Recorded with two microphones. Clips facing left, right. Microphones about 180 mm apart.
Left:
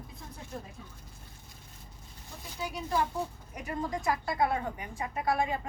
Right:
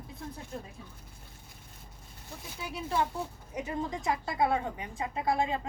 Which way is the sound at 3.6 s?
25° right (ahead or behind).